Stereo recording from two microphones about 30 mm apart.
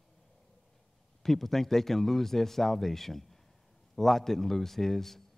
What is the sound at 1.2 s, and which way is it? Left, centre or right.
Speech, centre.